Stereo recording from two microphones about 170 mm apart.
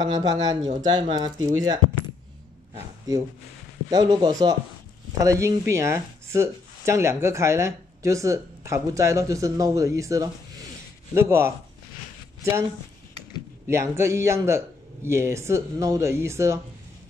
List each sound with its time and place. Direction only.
0.0 s speech: 20° right (ahead or behind)
3.9 s speech: 25° right (ahead or behind)
13.7 s speech: 15° right (ahead or behind)